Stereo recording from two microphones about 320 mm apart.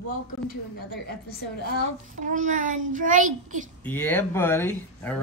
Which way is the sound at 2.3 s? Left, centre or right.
Right.